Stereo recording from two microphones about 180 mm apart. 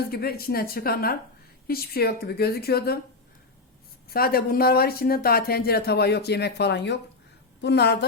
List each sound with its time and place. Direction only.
0.1 s speech: 60° left (ahead or behind)
4.1 s a woman's voice: 55° left (ahead or behind)